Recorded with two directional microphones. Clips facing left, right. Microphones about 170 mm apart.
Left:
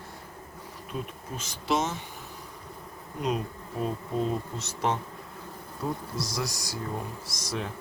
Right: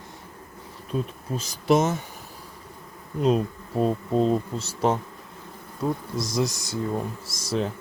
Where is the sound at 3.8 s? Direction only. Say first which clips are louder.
Right 7 dB; 30° right (ahead or behind).